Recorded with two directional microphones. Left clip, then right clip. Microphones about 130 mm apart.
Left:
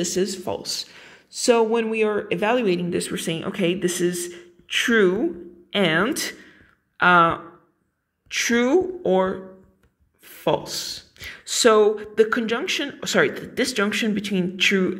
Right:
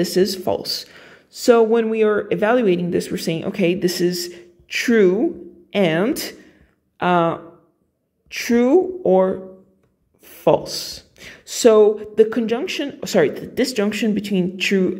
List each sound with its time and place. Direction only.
0.0 s speech: 25° right (ahead or behind)
10.2 s a sound: 25° right (ahead or behind)
10.7 s speech: 25° right (ahead or behind)